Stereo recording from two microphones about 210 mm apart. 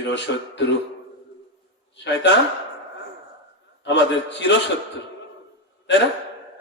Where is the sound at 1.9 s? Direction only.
55° left (ahead or behind).